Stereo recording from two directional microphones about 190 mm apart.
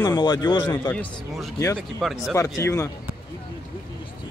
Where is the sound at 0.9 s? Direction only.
10° left (ahead or behind).